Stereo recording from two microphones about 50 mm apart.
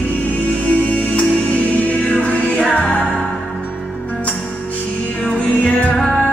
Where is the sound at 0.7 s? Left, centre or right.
Left.